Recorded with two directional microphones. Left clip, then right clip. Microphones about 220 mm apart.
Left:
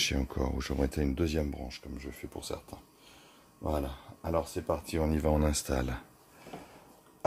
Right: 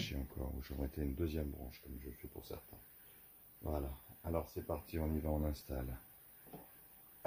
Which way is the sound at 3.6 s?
35° left (ahead or behind).